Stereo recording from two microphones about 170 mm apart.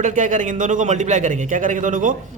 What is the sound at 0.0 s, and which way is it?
A man's voice, 50° right (ahead or behind).